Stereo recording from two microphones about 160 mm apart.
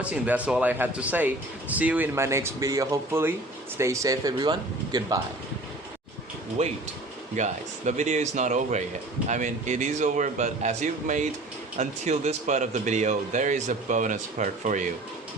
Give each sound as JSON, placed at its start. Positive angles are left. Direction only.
{"t": 0.0, "sound": "speech", "side_deg": -10}
{"t": 6.6, "sound": "speech", "side_deg": -45}